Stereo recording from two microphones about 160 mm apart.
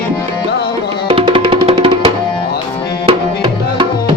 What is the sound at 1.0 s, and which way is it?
Music, 30° right (ahead or behind).